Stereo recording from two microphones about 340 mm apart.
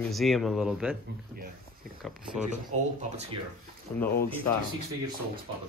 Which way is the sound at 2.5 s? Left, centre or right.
Right.